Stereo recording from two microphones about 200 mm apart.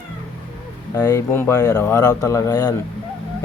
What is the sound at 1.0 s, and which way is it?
Speech, 15° left (ahead or behind).